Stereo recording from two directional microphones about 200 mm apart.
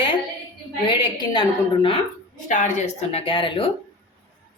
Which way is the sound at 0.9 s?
20° left (ahead or behind).